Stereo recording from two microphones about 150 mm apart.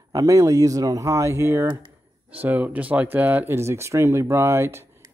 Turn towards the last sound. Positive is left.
turn(degrees=-15)  # may be behind; listen again after turning